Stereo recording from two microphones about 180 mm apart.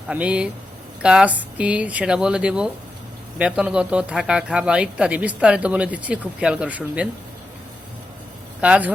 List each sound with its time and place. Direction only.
0.1 s speech: 5° right (ahead or behind)
8.6 s speech: 5° right (ahead or behind)